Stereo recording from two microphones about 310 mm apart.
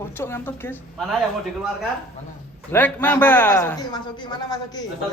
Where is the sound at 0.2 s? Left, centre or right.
Centre.